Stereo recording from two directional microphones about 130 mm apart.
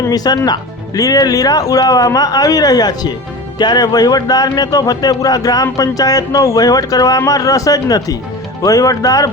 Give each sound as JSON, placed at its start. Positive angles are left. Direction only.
{"t": 0.0, "sound": "speech", "side_deg": 30}